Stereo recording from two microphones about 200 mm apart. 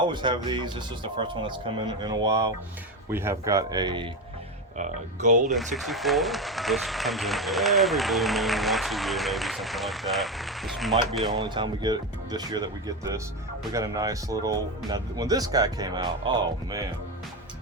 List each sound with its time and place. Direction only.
0.1 s speech: 25° right (ahead or behind)
3.1 s speech: 10° right (ahead or behind)
4.8 s speech: 40° right (ahead or behind)
5.5 s speech: centre (ahead or behind)
11.3 s speech: 25° right (ahead or behind)
13.7 s speech: 15° right (ahead or behind)